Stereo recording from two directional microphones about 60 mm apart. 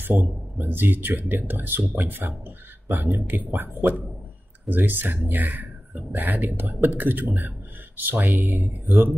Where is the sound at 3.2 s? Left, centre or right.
Right.